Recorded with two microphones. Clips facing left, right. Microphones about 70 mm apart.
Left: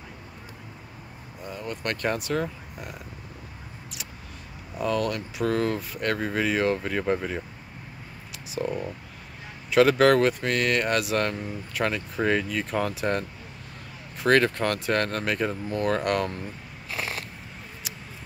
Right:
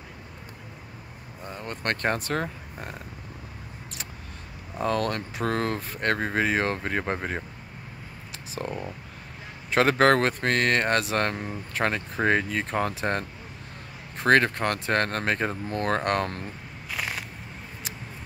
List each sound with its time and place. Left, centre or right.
1.4 s speech: right
4.7 s speech: right
8.6 s speech: right